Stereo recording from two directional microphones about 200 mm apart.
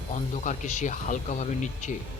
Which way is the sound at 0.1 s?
40° left (ahead or behind).